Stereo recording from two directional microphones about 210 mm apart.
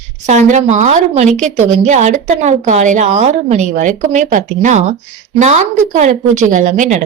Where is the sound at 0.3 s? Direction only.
35° right (ahead or behind).